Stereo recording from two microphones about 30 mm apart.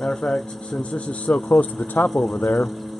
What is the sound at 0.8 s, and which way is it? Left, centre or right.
Speech, left.